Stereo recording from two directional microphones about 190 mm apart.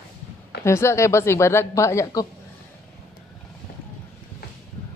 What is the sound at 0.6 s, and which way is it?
Speech, 15° left (ahead or behind).